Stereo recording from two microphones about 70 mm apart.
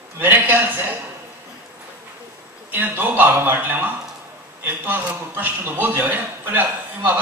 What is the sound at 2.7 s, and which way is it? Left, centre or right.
A man's voice, right.